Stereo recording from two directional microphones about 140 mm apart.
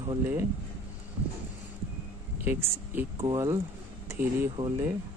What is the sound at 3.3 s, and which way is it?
Speech, 25° right (ahead or behind).